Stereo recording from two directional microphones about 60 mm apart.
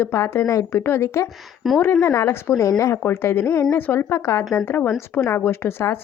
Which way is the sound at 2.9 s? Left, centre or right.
Left.